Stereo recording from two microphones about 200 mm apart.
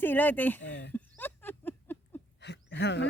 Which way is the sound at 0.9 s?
10° left (ahead or behind).